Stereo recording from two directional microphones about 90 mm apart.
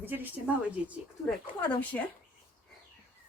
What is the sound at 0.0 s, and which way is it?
Speech, 20° right (ahead or behind).